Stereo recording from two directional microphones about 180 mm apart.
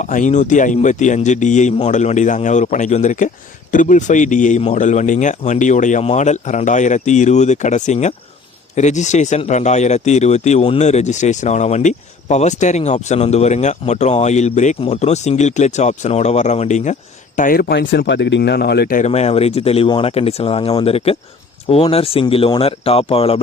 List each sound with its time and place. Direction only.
0.0 s speech: 45° left (ahead or behind)